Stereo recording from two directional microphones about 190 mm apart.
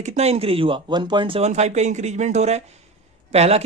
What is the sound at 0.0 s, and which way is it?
Speech, 35° right (ahead or behind).